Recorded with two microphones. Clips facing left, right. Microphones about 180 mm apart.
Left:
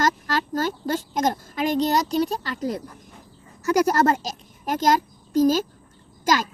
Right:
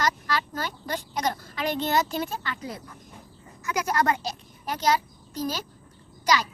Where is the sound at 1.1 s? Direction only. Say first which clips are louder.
Left 5 dB; 45° left (ahead or behind).